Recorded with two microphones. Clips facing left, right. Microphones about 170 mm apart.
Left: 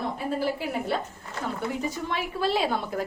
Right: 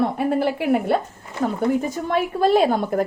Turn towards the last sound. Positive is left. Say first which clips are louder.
# right 9 dB
turn(degrees=-50)  # may be behind; listen again after turning